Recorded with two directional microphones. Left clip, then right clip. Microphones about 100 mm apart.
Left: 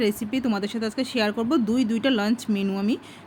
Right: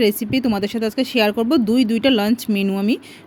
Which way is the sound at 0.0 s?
50° right (ahead or behind).